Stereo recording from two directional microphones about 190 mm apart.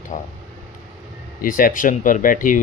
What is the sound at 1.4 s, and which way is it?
Speech, 45° left (ahead or behind).